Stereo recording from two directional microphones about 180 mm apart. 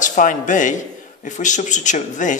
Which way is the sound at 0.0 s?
45° left (ahead or behind).